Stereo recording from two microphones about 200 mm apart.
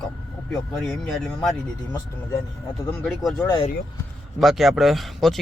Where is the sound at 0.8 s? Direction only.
Centre (ahead or behind).